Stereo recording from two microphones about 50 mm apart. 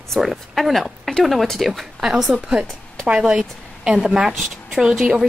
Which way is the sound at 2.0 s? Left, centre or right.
Centre.